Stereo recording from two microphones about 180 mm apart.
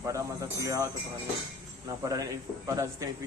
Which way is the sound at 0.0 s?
15° right (ahead or behind).